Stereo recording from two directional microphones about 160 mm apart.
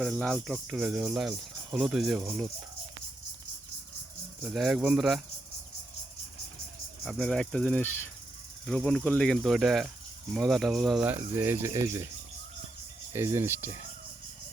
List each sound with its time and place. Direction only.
0.0 s speech: 5° left (ahead or behind)
4.4 s speech: centre (ahead or behind)
7.0 s speech: centre (ahead or behind)
11.1 s speech: 15° right (ahead or behind)
13.1 s speech: 15° right (ahead or behind)